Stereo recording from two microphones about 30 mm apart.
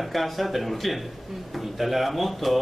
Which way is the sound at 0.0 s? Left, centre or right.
Centre.